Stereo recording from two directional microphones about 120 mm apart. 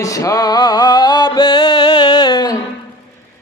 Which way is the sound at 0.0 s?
30° left (ahead or behind).